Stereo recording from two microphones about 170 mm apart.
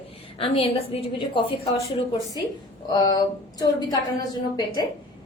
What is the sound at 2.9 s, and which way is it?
A woman's voice, 25° left (ahead or behind).